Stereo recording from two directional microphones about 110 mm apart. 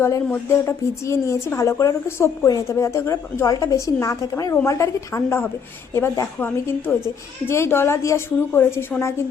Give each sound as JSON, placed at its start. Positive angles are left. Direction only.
{"t": 0.0, "sound": "speech", "side_deg": 25}